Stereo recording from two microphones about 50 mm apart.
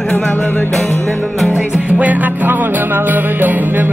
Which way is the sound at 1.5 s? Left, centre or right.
Right.